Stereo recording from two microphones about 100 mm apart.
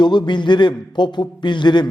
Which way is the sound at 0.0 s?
50° left (ahead or behind).